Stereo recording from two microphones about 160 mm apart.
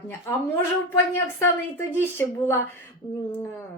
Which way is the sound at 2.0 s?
15° left (ahead or behind).